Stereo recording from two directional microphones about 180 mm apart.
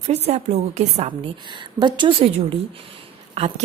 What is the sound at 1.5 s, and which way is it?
A woman's voice, 25° right (ahead or behind).